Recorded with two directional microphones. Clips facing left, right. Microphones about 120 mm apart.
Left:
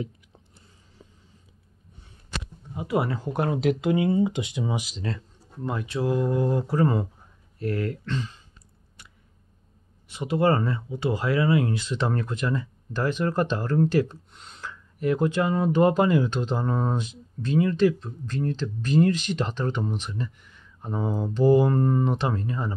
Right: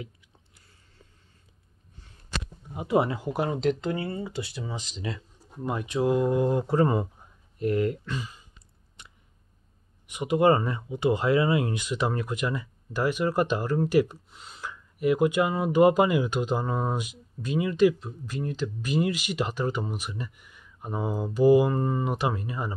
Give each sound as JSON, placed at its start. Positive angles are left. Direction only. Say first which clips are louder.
{"t": 1.0, "sound": "a sound", "louder": "left 6 dB", "side_deg": 20}
{"t": 2.7, "sound": "speech", "louder": "right 2 dB", "side_deg": -20}
{"t": 3.2, "sound": "speech", "louder": "left 1 dB", "side_deg": -5}
{"t": 3.6, "sound": "speech", "louder": "left 4 dB", "side_deg": 10}
{"t": 5.0, "sound": "speech", "louder": "left 2 dB", "side_deg": -15}
{"t": 9.0, "sound": "a sound", "louder": "right 1 dB", "side_deg": -20}
{"t": 10.0, "sound": "speech", "louder": "right 1 dB", "side_deg": -15}